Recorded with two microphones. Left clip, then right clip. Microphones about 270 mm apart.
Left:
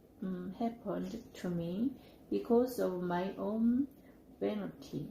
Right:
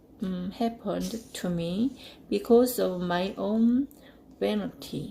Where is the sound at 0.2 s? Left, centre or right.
Right.